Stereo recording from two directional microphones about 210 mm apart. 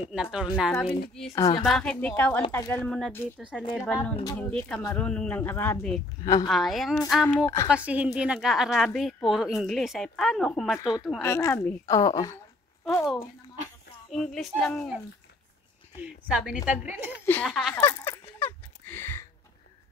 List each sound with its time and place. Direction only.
0.1 s a woman's voice: 5° right (ahead or behind)
1.3 s a woman's voice: 15° left (ahead or behind)
1.6 s a woman's voice: centre (ahead or behind)
7.4 s a woman's voice: 15° left (ahead or behind)
7.7 s a woman's voice: 5° right (ahead or behind)
11.2 s a woman's voice: 15° left (ahead or behind)
12.8 s a woman's voice: centre (ahead or behind)
16.0 s a woman's voice: 5° right (ahead or behind)
17.7 s a sound: 10° left (ahead or behind)